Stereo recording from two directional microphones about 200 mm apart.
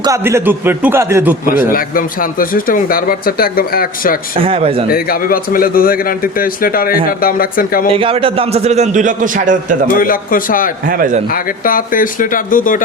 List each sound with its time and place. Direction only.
0.0 s a man's voice: 15° right (ahead or behind)
1.7 s speech: 45° left (ahead or behind)
4.4 s speech: 30° right (ahead or behind)
4.9 s speech: 45° left (ahead or behind)
7.9 s a man's voice: 25° right (ahead or behind)
9.9 s speech: 45° left (ahead or behind)
10.8 s a man's voice: 45° right (ahead or behind)
11.6 s speech: 45° left (ahead or behind)